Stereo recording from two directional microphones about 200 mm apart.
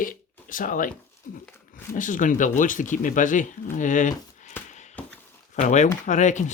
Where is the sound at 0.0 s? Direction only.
40° left (ahead or behind).